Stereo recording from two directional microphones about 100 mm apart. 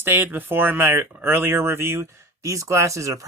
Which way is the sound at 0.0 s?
20° right (ahead or behind).